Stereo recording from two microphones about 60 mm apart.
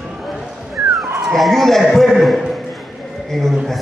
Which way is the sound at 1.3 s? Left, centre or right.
Centre.